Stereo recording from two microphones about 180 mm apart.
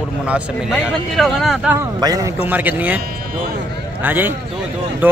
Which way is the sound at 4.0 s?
10° right (ahead or behind).